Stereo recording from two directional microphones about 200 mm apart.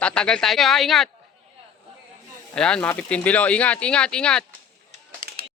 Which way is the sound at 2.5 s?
5° left (ahead or behind).